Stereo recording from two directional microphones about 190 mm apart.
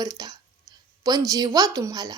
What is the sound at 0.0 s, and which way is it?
Speech, 20° right (ahead or behind).